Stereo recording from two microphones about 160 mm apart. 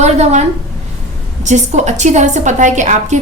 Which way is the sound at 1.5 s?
45° right (ahead or behind).